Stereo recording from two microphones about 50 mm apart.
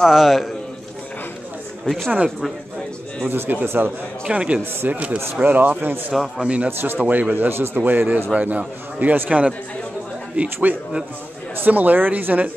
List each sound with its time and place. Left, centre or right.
0.0 s a man's voice: centre
1.9 s a man's voice: centre
3.3 s a man's voice: right
4.3 s a man's voice: right
6.1 s a man's voice: centre
6.4 s a man's voice: right
11.5 s speech: right